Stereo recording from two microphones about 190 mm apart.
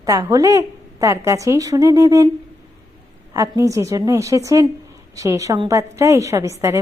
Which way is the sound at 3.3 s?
15° right (ahead or behind).